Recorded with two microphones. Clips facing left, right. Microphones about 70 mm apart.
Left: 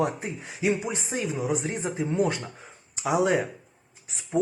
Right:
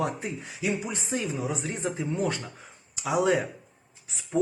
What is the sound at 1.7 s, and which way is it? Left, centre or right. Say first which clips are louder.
Speech: left 2 dB; left.